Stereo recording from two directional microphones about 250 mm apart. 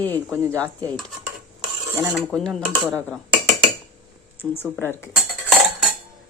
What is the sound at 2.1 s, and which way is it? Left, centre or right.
Speech, centre.